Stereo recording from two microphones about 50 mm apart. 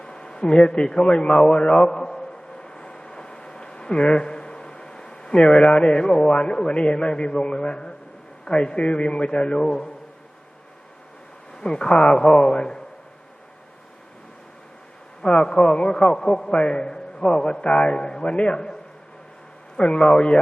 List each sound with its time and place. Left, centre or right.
0.0 s a sound: centre
0.9 s a man's voice: centre
2.6 s a sound: centre
4.0 s a man's voice: centre
11.5 s a man's voice: centre
15.2 s a man's voice: left
19.7 s a man's voice: left